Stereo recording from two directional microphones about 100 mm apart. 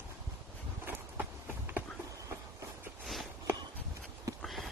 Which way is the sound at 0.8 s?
20° right (ahead or behind).